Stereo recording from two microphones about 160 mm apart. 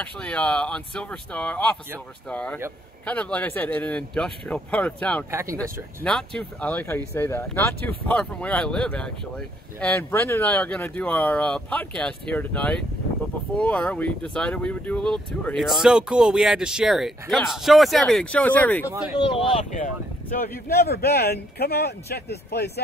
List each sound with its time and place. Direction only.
0.0 s speech: 10° left (ahead or behind)
5.3 s speech: 15° right (ahead or behind)
5.6 s speech: 5° left (ahead or behind)
18.9 s speech: 5° right (ahead or behind)
19.1 s speech: 30° left (ahead or behind)
19.8 s speech: 60° left (ahead or behind); by 22.7 s 90° left